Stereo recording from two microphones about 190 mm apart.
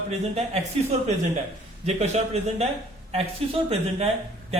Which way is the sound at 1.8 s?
35° right (ahead or behind).